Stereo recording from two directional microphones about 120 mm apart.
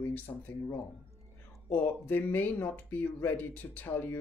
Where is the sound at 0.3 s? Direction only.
25° left (ahead or behind).